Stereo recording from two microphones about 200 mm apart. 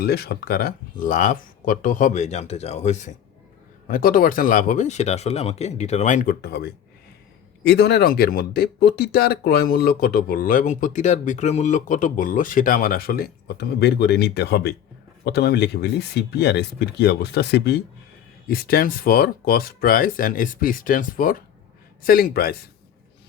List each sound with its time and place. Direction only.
0.0 s speech: 55° left (ahead or behind)